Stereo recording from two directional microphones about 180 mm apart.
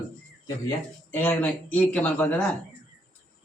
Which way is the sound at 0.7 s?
10° left (ahead or behind).